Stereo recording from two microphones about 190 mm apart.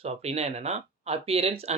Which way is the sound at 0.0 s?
35° right (ahead or behind).